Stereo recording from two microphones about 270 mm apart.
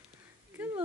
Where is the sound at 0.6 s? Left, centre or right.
Centre.